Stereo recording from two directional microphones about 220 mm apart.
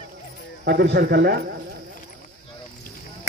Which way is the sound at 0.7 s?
50° right (ahead or behind).